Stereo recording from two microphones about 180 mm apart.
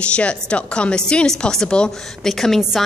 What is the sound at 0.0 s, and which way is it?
A woman's voice, 5° left (ahead or behind).